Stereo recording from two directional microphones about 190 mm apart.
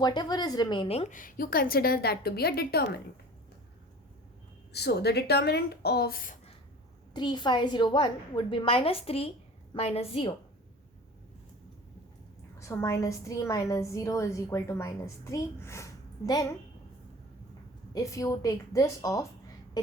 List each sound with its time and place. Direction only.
0.0 s a woman's voice: 20° left (ahead or behind)
1.2 s a woman's voice: 50° left (ahead or behind)
4.7 s a woman's voice: 60° left (ahead or behind)
7.1 s a woman's voice: 25° left (ahead or behind)
12.5 s a woman's voice: 15° left (ahead or behind)
17.9 s a woman's voice: 15° left (ahead or behind)